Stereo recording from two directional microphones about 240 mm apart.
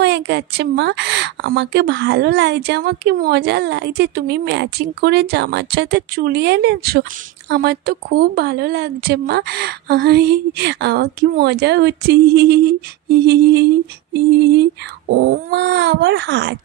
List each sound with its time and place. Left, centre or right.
0.0 s a woman's voice: right